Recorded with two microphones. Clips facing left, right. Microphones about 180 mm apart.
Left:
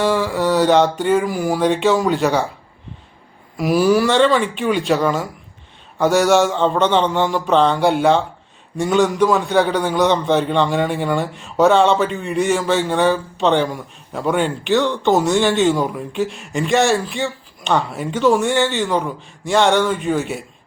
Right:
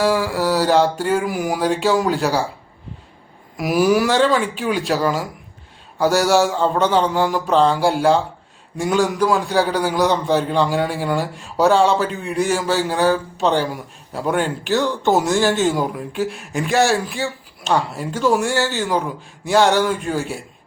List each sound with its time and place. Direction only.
0.0 s a man's voice: 5° right (ahead or behind)
3.6 s a man's voice: 10° right (ahead or behind)